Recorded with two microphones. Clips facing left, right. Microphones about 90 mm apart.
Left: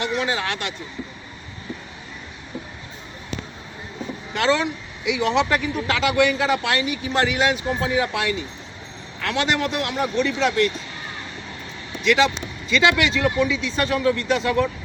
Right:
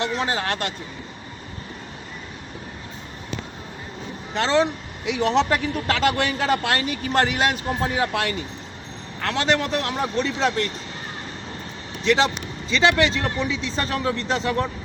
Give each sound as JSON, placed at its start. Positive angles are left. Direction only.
{"t": 0.0, "sound": "speech", "side_deg": -35}
{"t": 4.4, "sound": "speech", "side_deg": -35}
{"t": 9.2, "sound": "speech", "side_deg": -35}
{"t": 12.0, "sound": "speech", "side_deg": -30}